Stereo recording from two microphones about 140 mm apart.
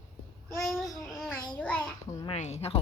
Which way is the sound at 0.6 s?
Centre (ahead or behind).